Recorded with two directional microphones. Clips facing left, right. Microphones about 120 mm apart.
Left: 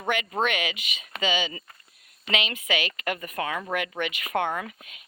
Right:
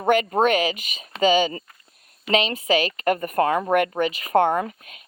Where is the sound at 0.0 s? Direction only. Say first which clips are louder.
Right 8 dB; 45° right (ahead or behind).